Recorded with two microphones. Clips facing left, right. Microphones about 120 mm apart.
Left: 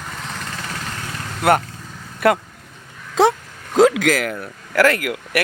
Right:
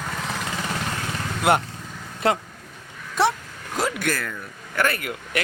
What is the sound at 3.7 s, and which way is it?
Speech, 90° left.